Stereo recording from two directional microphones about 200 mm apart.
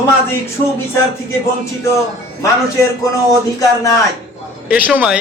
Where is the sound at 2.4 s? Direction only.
15° left (ahead or behind).